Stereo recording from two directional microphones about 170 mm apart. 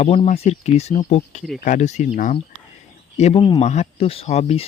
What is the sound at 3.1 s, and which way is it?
Speech, 35° left (ahead or behind).